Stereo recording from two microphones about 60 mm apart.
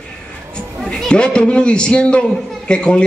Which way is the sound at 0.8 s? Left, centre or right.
Centre.